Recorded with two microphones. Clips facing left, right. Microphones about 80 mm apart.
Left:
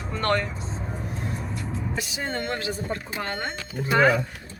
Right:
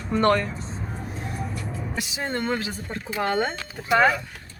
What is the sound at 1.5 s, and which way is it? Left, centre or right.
Vehicle, left.